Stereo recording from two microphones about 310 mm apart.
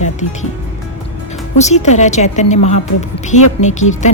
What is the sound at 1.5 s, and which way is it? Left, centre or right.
Speech, left.